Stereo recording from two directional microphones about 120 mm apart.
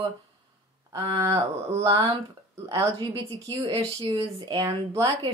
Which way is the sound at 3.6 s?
45° right (ahead or behind).